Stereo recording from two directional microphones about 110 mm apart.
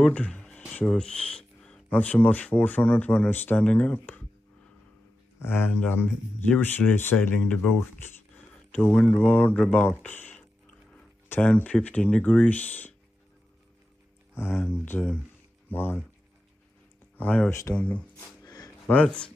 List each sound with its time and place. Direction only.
0.0 s a sound: 10° left (ahead or behind)
1.9 s speech: 15° left (ahead or behind)
5.4 s speech: 20° left (ahead or behind)
8.7 s speech: 10° left (ahead or behind)
14.4 s speech: 20° left (ahead or behind)
17.2 s speech: 15° left (ahead or behind)
17.5 s speech: 30° left (ahead or behind)
17.7 s speech: 15° left (ahead or behind)
18.4 s a sound: 35° left (ahead or behind)
18.9 s speech: 10° left (ahead or behind)